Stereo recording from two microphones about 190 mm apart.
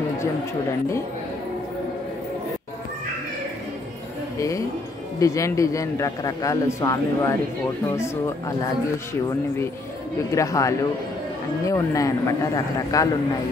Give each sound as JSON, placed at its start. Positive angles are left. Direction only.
{"t": 4.4, "sound": "a man's voice", "side_deg": 15}
{"t": 10.3, "sound": "a man's voice", "side_deg": 15}